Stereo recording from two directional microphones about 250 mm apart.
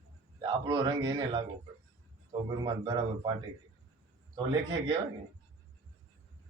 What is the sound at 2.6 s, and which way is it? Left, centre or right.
Speech, centre.